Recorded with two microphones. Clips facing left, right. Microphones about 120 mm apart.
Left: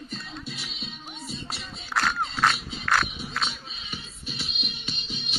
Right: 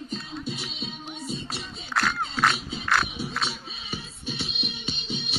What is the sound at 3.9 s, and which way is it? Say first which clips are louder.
Music: right 5 dB; 30° right (ahead or behind).